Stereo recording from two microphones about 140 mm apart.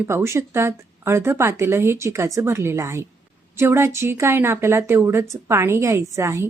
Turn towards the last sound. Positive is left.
turn(degrees=-20)  # may be behind; listen again after turning